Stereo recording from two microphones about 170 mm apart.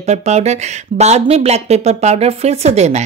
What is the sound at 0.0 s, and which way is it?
Speech, 40° right (ahead or behind).